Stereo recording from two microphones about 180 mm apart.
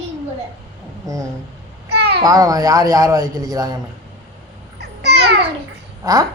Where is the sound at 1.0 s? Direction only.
20° right (ahead or behind).